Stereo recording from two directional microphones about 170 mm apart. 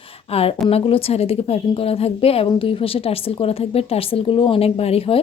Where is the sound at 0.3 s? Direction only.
35° left (ahead or behind).